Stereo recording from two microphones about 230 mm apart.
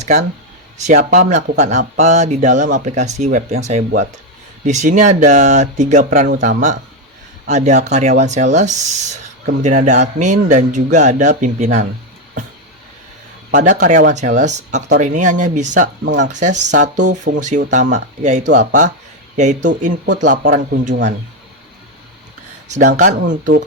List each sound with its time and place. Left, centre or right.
0.0 s a man's voice: right
13.5 s a man's voice: right
16.0 s speech: right
16.3 s a man's voice: right